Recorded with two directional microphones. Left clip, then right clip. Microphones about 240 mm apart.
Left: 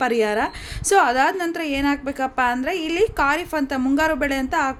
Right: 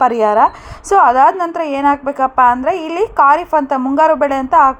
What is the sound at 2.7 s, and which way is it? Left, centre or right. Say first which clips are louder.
Speech: right 6 dB; centre.